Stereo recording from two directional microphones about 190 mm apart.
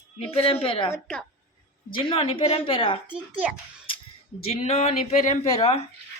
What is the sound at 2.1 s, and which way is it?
Speech, 30° left (ahead or behind).